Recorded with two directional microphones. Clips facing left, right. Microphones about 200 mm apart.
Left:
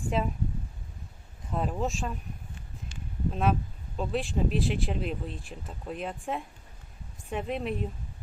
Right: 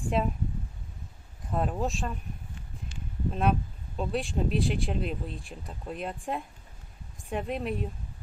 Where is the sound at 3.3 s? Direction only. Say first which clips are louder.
Right 1 dB; centre (ahead or behind).